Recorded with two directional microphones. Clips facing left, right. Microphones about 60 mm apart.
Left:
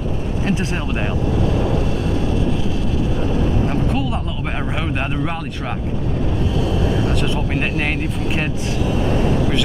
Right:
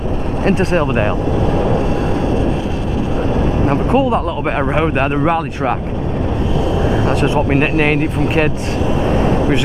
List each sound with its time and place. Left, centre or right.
0.4 s speech: right
0.7 s speech: right
3.6 s speech: right
7.1 s speech: right
9.0 s vehicle: right